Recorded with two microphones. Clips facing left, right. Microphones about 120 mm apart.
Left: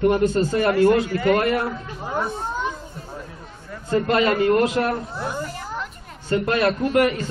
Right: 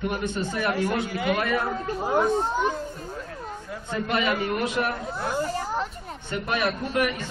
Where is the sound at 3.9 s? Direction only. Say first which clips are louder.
Left 7 dB; 75° left (ahead or behind).